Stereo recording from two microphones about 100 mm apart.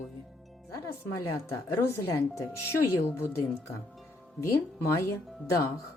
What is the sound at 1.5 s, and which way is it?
Speech, 30° left (ahead or behind).